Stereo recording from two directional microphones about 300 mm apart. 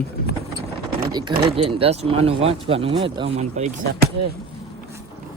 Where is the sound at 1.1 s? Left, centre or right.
Centre.